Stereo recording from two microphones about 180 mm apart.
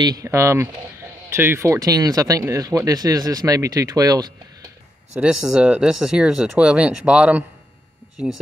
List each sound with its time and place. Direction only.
0.0 s speech: 20° right (ahead or behind)
5.2 s speech: 5° right (ahead or behind)